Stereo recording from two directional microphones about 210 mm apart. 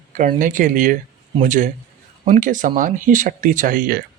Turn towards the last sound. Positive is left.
turn(degrees=-40)  # may be behind; listen again after turning